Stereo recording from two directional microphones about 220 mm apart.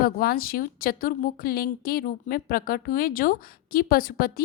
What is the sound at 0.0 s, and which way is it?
A woman's voice, 40° left (ahead or behind).